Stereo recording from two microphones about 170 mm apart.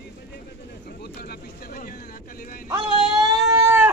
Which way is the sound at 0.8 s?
70° left (ahead or behind).